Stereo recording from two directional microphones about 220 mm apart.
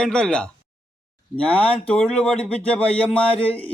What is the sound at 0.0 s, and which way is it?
A man's voice, 5° left (ahead or behind).